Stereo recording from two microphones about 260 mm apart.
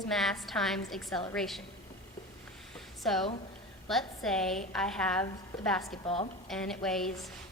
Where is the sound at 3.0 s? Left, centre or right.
Centre.